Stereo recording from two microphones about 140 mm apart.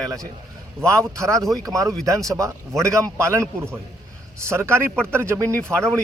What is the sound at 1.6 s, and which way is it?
A man's voice, 25° right (ahead or behind).